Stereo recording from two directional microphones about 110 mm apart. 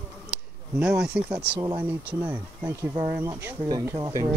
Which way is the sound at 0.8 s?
10° right (ahead or behind).